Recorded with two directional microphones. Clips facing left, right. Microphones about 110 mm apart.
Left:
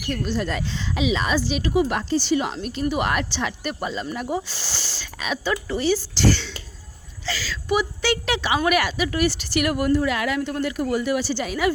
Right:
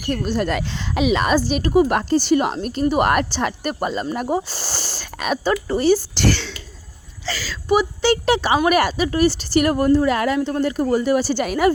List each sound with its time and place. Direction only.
0.1 s speech: 45° right (ahead or behind); by 6.5 s 70° right (ahead or behind)
7.3 s a woman's voice: 40° right (ahead or behind)